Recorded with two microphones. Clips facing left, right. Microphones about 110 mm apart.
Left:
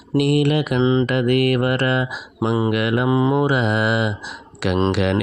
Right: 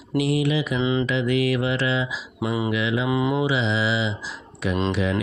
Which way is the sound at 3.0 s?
30° left (ahead or behind).